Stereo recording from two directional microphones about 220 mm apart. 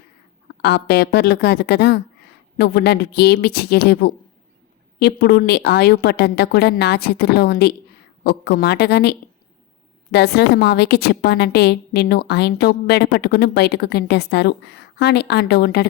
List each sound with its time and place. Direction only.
0.6 s a woman's voice: 50° left (ahead or behind)